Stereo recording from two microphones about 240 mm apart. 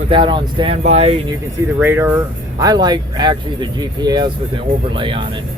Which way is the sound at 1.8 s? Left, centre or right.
Centre.